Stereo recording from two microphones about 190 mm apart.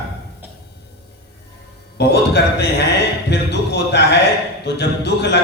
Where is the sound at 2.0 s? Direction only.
60° left (ahead or behind).